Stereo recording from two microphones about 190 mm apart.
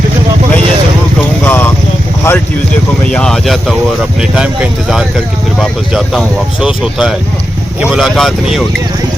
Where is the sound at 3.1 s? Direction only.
5° left (ahead or behind).